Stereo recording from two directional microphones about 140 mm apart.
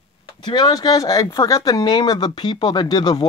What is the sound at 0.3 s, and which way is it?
Speech, 35° left (ahead or behind).